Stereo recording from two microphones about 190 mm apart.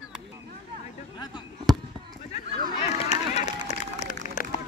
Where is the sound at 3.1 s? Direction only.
35° left (ahead or behind).